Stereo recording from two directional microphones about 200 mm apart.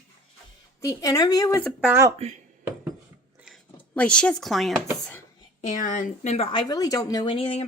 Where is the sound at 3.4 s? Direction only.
Centre (ahead or behind).